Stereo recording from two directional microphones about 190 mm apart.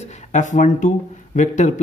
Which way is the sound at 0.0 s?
40° left (ahead or behind).